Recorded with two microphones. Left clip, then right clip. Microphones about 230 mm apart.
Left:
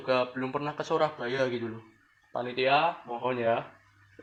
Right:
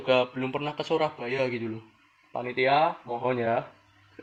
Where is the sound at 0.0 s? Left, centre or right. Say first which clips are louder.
Right 3 dB; right.